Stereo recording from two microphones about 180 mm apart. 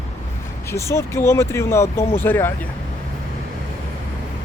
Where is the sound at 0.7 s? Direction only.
15° left (ahead or behind).